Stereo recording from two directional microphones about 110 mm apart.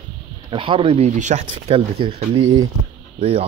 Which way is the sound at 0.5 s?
50° right (ahead or behind).